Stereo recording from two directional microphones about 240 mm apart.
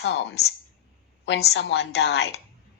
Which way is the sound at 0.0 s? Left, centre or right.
Left.